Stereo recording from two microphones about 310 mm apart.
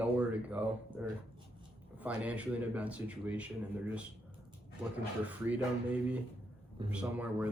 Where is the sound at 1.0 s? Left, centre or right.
Centre.